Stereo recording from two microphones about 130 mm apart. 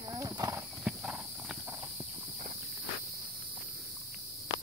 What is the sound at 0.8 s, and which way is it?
Clip-clop, 5° right (ahead or behind).